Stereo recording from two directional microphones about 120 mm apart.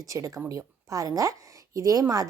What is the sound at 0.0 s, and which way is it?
Speech, 30° right (ahead or behind).